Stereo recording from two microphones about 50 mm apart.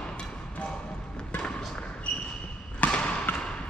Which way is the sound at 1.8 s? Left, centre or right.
Left.